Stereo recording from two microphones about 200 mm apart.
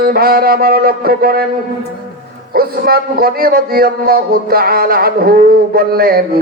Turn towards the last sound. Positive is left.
turn(degrees=-50)  # may be behind; listen again after turning